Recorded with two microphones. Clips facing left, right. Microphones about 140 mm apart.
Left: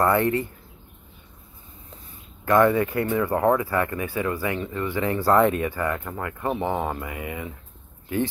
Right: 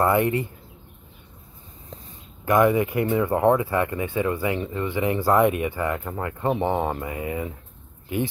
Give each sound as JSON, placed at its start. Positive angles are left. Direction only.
{"t": 0.0, "sound": "speech", "side_deg": -20}
{"t": 2.4, "sound": "speech", "side_deg": -15}
{"t": 8.1, "sound": "speech", "side_deg": -20}